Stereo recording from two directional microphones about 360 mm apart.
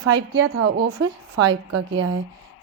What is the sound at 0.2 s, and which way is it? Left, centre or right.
A woman's voice, right.